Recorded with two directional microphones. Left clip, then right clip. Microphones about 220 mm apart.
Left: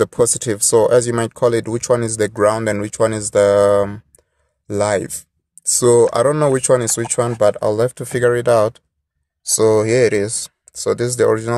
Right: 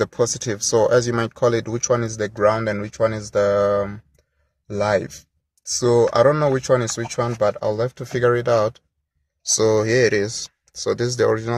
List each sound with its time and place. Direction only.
0.0 s speech: 25° left (ahead or behind)